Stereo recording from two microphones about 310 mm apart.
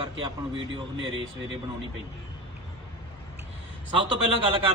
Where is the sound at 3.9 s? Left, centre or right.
Centre.